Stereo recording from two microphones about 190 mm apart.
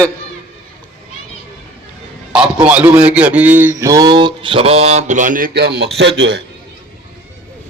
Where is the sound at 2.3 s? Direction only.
5° right (ahead or behind); by 6.4 s 65° right (ahead or behind).